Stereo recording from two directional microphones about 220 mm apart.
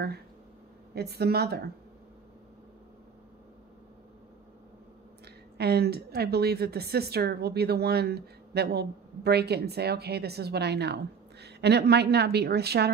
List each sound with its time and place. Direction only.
0.9 s a woman's voice: 45° right (ahead or behind)
5.6 s a woman's voice: 45° right (ahead or behind)